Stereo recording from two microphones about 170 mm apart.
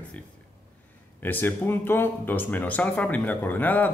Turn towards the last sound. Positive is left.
turn(degrees=10)  # may be behind; listen again after turning